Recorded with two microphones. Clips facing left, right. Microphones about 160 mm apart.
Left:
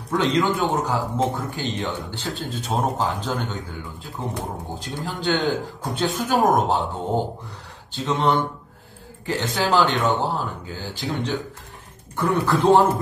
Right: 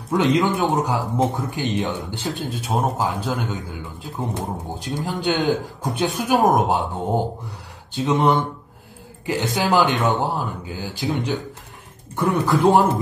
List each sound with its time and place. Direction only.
0.1 s speech: 20° right (ahead or behind)
7.9 s speech: 15° right (ahead or behind)